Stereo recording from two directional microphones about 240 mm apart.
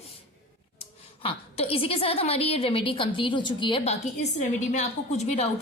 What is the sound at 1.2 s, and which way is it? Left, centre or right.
A woman's voice, left.